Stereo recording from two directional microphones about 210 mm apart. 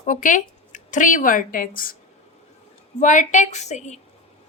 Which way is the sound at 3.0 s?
35° left (ahead or behind).